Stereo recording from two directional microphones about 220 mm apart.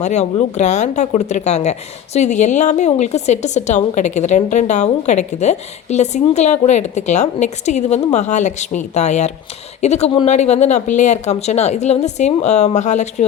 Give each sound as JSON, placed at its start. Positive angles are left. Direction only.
{"t": 0.0, "sound": "a woman's voice", "side_deg": 30}